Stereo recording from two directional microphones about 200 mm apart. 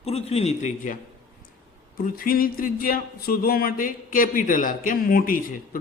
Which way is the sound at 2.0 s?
45° left (ahead or behind).